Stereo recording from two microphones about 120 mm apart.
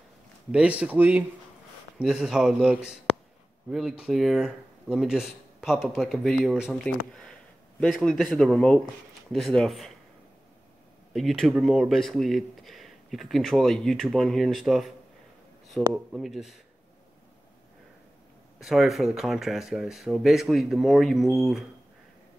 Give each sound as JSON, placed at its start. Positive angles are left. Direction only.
{"t": 0.5, "sound": "speech", "side_deg": -10}
{"t": 4.0, "sound": "speech", "side_deg": 0}
{"t": 7.8, "sound": "speech", "side_deg": 5}
{"t": 11.1, "sound": "speech", "side_deg": 0}
{"t": 15.9, "sound": "speech", "side_deg": 0}
{"t": 18.6, "sound": "speech", "side_deg": 0}